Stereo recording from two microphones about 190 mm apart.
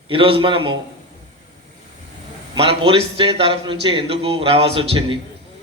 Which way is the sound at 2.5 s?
30° right (ahead or behind).